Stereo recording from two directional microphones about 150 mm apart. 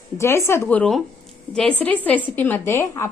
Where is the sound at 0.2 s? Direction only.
20° left (ahead or behind).